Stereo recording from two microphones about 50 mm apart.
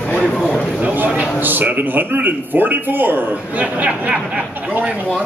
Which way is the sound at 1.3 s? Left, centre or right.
Right.